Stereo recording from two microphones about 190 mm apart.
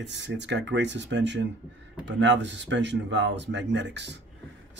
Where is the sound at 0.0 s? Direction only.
70° right (ahead or behind).